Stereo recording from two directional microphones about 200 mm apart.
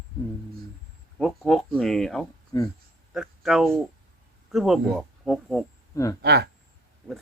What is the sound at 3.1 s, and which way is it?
Speech, centre (ahead or behind).